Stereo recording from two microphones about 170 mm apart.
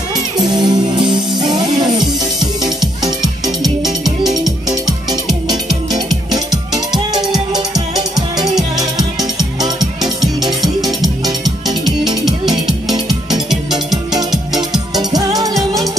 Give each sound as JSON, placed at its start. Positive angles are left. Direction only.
{"t": 0.4, "sound": "music", "side_deg": -25}
{"t": 6.3, "sound": "music", "side_deg": -25}
{"t": 9.8, "sound": "music", "side_deg": 0}
{"t": 13.3, "sound": "music", "side_deg": 0}
{"t": 15.0, "sound": "music", "side_deg": -20}